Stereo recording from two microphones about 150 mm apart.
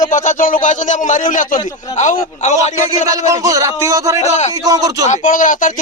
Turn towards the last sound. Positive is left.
turn(degrees=60)  # may be behind; listen again after turning